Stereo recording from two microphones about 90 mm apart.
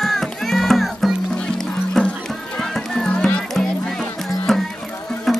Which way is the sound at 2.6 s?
5° left (ahead or behind).